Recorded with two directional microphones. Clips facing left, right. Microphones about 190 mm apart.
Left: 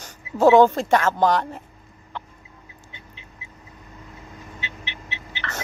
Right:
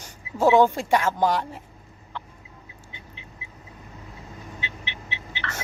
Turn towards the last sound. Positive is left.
turn(degrees=40)  # may be behind; listen again after turning